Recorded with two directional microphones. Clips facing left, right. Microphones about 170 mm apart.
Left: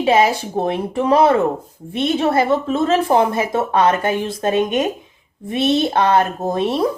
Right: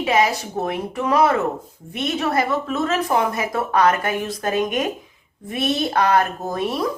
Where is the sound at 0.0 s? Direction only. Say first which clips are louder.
Left 4 dB; 30° left (ahead or behind).